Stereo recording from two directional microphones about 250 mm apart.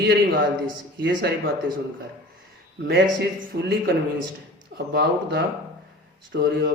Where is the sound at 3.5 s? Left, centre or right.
Right.